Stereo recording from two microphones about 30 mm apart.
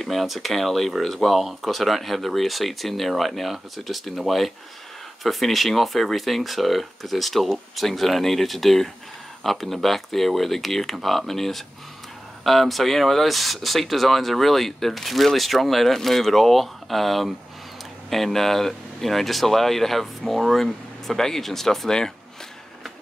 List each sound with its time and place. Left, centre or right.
0.0 s speech: centre